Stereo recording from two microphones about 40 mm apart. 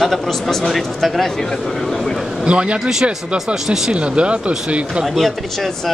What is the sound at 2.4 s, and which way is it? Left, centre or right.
Speech, right.